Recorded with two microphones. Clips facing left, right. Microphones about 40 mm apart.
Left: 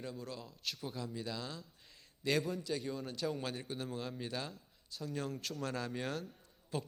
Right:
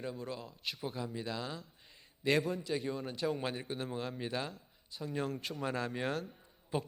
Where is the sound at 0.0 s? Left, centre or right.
Centre.